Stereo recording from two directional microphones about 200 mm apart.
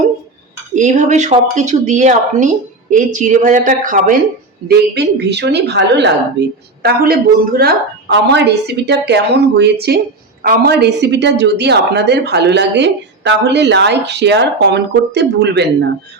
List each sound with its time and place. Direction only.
0.8 s speech: 35° right (ahead or behind)
4.7 s a woman's voice: 55° right (ahead or behind)